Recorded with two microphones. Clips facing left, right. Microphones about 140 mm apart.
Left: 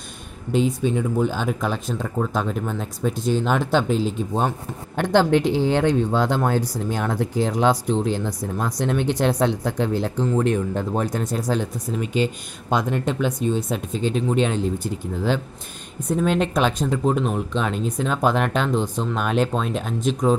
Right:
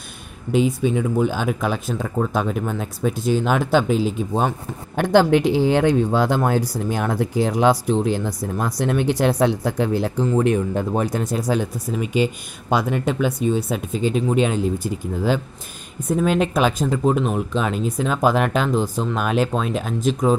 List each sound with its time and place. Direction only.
0.5 s speech: 10° right (ahead or behind)